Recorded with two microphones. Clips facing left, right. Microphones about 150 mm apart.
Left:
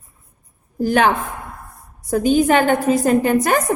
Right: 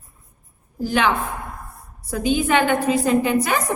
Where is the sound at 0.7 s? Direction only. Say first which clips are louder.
Left 4 dB; 50° left (ahead or behind).